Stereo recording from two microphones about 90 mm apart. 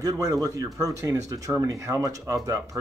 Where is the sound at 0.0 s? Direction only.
45° right (ahead or behind).